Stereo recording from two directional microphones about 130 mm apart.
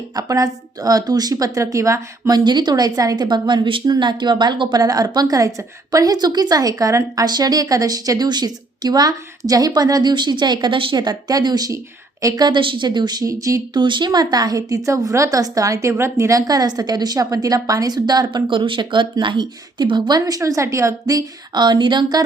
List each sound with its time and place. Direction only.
0.2 s a woman's voice: 30° right (ahead or behind)
13.8 s a woman's voice: 35° right (ahead or behind)